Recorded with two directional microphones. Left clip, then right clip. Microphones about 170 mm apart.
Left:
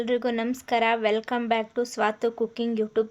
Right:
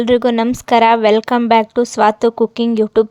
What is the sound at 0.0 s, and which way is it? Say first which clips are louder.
A woman's voice: right 12 dB; 60° right (ahead or behind).